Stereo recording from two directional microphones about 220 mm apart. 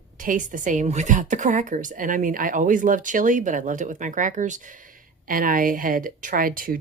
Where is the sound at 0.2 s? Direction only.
35° right (ahead or behind).